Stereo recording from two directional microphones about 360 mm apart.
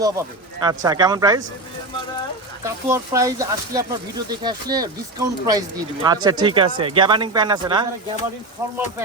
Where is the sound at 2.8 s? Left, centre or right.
Centre.